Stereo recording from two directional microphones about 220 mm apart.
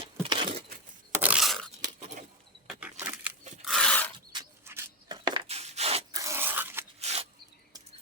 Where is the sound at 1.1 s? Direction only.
5° right (ahead or behind).